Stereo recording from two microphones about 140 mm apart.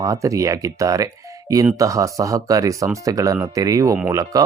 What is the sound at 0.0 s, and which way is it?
A man's voice, 25° right (ahead or behind).